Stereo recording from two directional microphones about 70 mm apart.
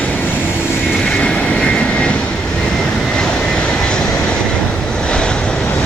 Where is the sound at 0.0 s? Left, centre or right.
Left.